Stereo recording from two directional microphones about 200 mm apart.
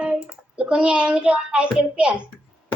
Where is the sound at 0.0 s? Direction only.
5° right (ahead or behind).